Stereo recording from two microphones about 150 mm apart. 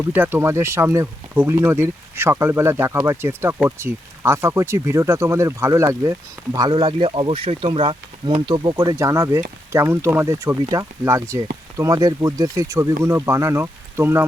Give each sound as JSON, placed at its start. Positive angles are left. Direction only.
{"t": 0.1, "sound": "speech", "side_deg": -15}